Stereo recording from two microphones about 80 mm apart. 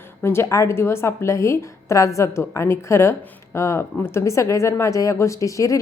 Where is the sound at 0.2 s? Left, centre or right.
Left.